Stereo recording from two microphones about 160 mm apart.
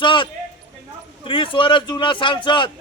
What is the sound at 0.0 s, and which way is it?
Speech, 30° left (ahead or behind).